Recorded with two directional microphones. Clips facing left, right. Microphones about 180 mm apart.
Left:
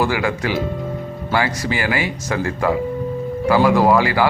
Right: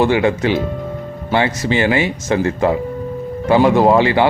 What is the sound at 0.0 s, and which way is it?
Speech, 25° right (ahead or behind).